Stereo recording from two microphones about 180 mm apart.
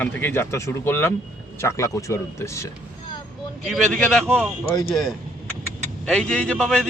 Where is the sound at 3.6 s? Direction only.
Centre (ahead or behind).